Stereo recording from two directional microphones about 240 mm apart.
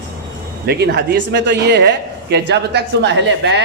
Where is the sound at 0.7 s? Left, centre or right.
Right.